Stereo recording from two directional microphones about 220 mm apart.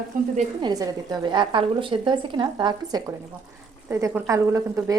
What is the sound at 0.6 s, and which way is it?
A woman's voice, 20° right (ahead or behind).